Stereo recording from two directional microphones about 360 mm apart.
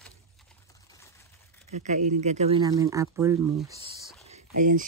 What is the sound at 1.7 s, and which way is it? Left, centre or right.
Speech, centre.